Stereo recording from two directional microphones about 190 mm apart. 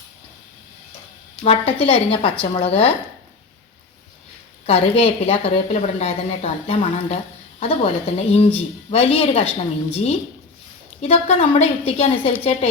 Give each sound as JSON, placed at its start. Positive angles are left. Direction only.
{"t": 1.5, "sound": "a woman's voice", "side_deg": 30}
{"t": 4.6, "sound": "a woman's voice", "side_deg": 30}